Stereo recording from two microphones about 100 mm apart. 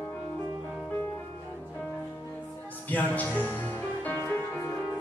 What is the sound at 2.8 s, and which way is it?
Speech, 15° left (ahead or behind).